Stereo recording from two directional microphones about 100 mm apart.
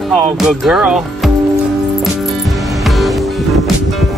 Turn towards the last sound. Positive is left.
turn(degrees=0)  # may be behind; listen again after turning